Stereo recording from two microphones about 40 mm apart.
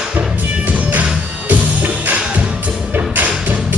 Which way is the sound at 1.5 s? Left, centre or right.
Right.